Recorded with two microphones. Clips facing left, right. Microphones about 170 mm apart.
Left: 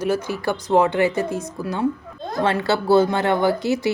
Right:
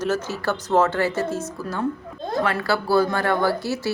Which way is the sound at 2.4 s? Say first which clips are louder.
Left 4 dB; 25° left (ahead or behind).